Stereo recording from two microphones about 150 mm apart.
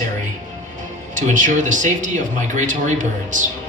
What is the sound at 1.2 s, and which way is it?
Speech, 60° right (ahead or behind).